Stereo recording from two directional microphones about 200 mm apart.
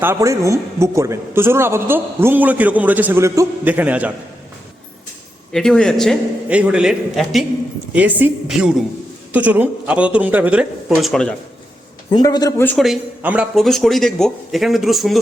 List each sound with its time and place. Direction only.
0.0 s a man's voice: 15° right (ahead or behind)
5.5 s a man's voice: centre (ahead or behind)
12.1 s speech: 20° left (ahead or behind)
12.7 s a man's voice: centre (ahead or behind)